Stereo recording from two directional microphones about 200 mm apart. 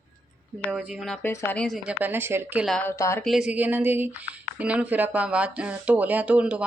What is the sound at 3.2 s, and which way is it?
Speech, centre (ahead or behind).